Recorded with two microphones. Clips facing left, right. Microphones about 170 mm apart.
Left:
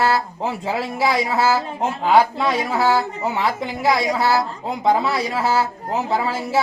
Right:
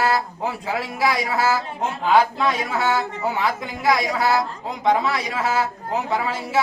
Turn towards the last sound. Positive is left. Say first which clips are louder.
# left 2 dB
turn(degrees=30)  # may be behind; listen again after turning